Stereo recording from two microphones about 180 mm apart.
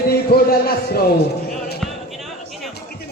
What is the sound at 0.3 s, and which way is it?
Speech, 60° left (ahead or behind).